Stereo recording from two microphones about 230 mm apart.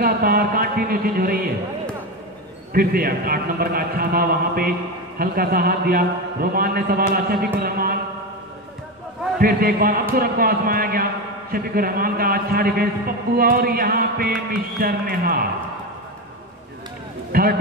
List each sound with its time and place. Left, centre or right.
0.0 s speech: right
2.7 s a man's voice: right
9.4 s a man's voice: right
17.3 s speech: right